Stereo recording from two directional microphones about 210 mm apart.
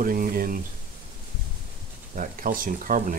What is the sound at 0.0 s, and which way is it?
Speech, 40° right (ahead or behind).